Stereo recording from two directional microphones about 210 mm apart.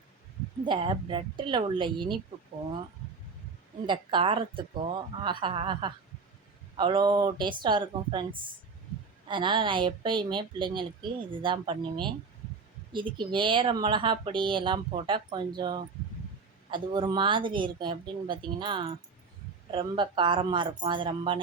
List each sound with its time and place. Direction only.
0.6 s speech: 25° right (ahead or behind)
3.8 s speech: 25° right (ahead or behind)